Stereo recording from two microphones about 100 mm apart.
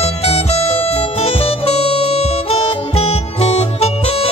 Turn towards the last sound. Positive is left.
turn(degrees=90)